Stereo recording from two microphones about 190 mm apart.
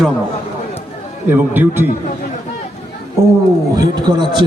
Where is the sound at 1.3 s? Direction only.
10° right (ahead or behind).